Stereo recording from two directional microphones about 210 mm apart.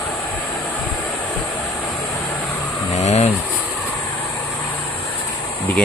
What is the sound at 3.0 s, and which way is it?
Vehicle, 30° left (ahead or behind).